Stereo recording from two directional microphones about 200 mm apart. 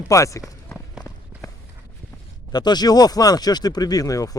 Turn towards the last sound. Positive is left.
turn(degrees=15)  # may be behind; listen again after turning